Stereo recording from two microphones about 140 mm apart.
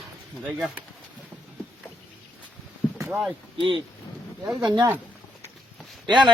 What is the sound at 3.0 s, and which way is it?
Speech, centre (ahead or behind).